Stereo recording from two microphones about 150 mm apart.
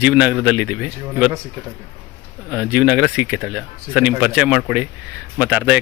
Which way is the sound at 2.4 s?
10° right (ahead or behind).